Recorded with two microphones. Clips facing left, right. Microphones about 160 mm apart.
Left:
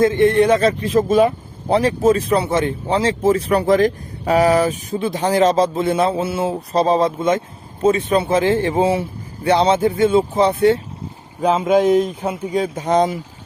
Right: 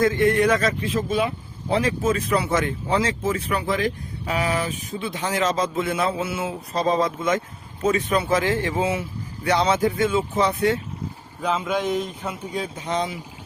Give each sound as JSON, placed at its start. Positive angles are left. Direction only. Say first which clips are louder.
{"t": 0.0, "sound": "speech", "louder": "left 5 dB", "side_deg": 25}
{"t": 11.4, "sound": "speech", "louder": "left 9 dB", "side_deg": 40}